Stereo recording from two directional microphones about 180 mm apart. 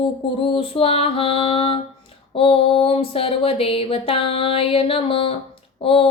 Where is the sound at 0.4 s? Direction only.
30° left (ahead or behind).